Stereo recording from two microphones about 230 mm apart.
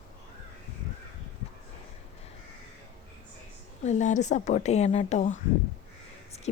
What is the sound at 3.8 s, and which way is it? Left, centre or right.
Speech, left.